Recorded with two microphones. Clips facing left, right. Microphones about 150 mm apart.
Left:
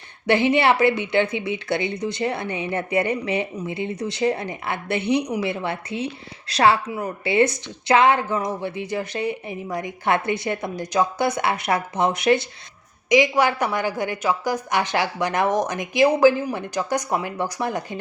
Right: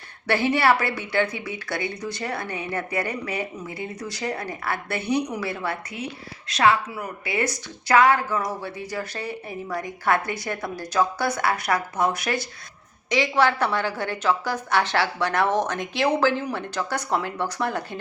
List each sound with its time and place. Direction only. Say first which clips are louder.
0.3 s a woman's voice: left 3 dB; 20° left (ahead or behind)